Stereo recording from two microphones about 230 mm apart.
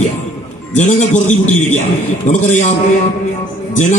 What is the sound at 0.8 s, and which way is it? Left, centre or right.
A man's voice, left.